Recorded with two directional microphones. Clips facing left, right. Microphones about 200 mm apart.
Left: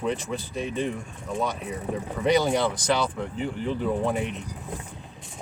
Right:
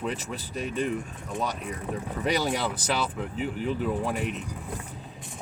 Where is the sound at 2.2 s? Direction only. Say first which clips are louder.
Left 5 dB; centre (ahead or behind).